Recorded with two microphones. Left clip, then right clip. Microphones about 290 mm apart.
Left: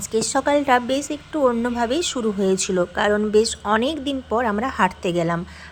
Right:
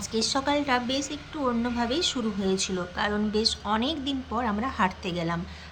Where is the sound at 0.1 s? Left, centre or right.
Centre.